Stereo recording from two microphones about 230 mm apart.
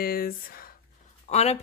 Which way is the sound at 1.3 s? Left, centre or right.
Left.